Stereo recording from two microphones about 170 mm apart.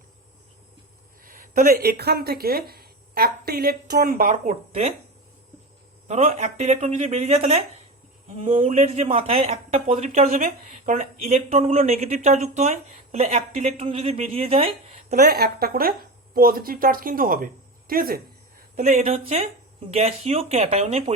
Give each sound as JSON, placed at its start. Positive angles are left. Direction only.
{"t": 1.2, "sound": "speech", "side_deg": -55}
{"t": 6.1, "sound": "speech", "side_deg": -40}
{"t": 8.6, "sound": "speech", "side_deg": -40}
{"t": 15.1, "sound": "speech", "side_deg": -65}
{"t": 18.8, "sound": "speech", "side_deg": -40}